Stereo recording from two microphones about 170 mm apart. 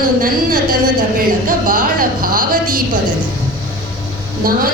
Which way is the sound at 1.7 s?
55° right (ahead or behind).